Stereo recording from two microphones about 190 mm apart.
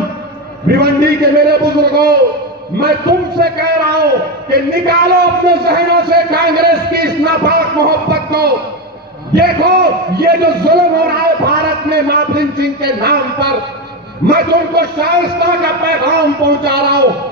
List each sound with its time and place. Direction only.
0.7 s a man's voice: 55° right (ahead or behind)